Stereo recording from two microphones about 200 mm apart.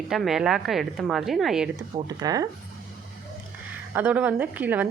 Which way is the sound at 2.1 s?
20° right (ahead or behind).